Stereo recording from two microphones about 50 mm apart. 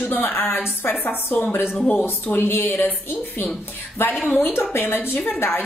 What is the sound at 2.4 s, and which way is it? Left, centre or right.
Speech, left.